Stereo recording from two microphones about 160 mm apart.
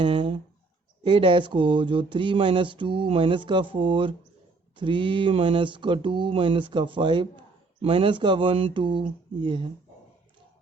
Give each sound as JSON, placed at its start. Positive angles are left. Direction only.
{"t": 0.0, "sound": "speech", "side_deg": -30}